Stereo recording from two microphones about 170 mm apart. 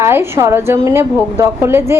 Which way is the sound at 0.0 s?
15° right (ahead or behind).